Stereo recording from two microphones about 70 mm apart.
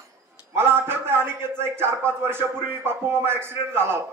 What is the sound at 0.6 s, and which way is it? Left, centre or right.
A man's voice, right.